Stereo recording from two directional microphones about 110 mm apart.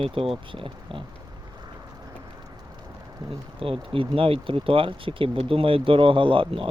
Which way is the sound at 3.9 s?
55° right (ahead or behind).